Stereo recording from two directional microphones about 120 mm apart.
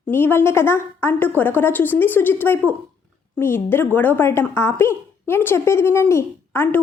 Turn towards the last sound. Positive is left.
turn(degrees=20)  # may be behind; listen again after turning